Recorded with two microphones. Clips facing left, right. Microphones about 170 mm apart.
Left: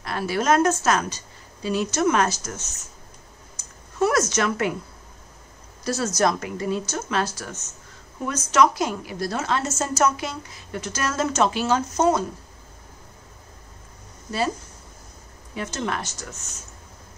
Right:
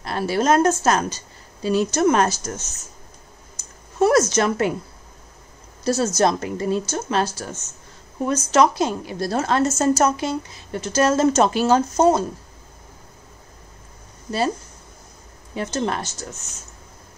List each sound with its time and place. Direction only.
0.0 s a woman's voice: 30° right (ahead or behind)
4.0 s a woman's voice: 30° right (ahead or behind)
5.9 s a woman's voice: 25° right (ahead or behind)
15.5 s a woman's voice: 35° right (ahead or behind)